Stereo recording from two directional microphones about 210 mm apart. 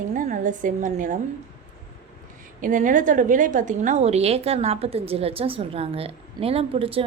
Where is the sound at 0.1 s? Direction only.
35° right (ahead or behind).